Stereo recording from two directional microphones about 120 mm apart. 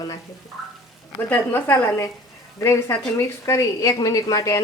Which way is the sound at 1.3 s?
15° left (ahead or behind).